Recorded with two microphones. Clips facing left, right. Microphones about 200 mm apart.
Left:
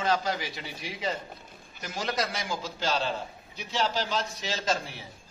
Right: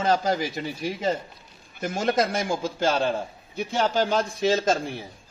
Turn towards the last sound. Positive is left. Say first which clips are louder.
# right 9 dB
turn(degrees=-50)  # may be behind; listen again after turning